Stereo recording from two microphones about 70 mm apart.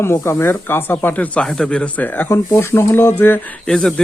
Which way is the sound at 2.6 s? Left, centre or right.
Left.